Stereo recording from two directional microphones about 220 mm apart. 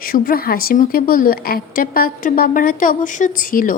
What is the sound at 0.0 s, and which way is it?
A woman's voice, 40° left (ahead or behind).